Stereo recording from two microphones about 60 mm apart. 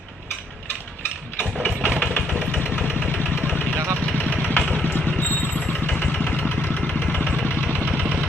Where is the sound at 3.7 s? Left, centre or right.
Right.